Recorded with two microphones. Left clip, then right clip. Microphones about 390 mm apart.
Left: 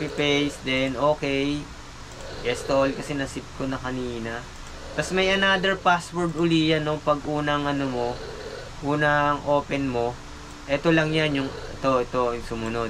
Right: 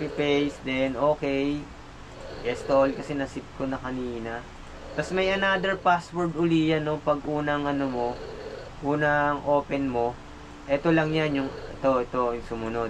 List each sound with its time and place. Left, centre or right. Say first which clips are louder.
0.0 s speech: left 2 dB; centre
7.9 s speech: left 1 dB; right
8.8 s speech: left 2 dB; centre